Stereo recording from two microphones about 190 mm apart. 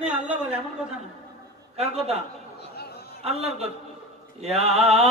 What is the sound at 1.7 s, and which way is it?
Mantra, 35° right (ahead or behind).